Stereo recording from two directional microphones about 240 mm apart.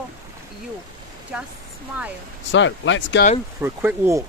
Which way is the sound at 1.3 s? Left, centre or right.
Centre.